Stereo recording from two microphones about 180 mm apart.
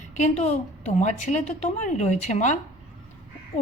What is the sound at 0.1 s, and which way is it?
A woman's voice, 40° left (ahead or behind).